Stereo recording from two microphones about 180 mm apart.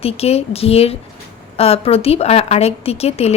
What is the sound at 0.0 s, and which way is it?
A woman's voice, 35° left (ahead or behind).